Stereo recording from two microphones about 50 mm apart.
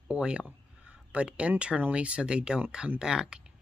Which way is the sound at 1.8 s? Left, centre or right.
Right.